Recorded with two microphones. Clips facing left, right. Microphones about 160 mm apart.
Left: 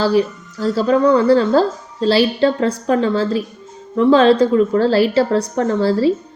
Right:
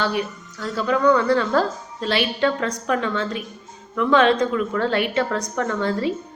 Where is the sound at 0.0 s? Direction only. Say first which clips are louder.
Left 8 dB; 30° left (ahead or behind).